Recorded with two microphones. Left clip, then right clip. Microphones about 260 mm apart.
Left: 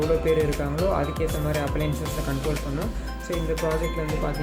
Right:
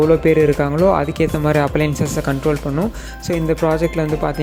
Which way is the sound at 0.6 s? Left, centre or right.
Right.